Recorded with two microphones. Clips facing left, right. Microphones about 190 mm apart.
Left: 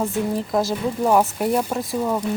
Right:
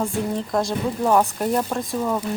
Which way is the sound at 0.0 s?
5° left (ahead or behind).